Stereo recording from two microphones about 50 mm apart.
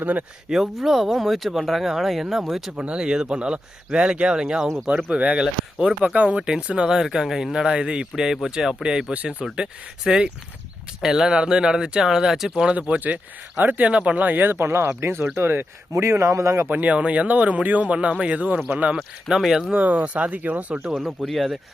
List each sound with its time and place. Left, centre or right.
0.0 s speech: right
0.5 s speech: centre
2.7 s speech: right
5.0 s speech: right
12.9 s speech: right
16.0 s speech: right
16.6 s speech: right
18.9 s speech: centre
19.7 s speech: right
20.9 s speech: centre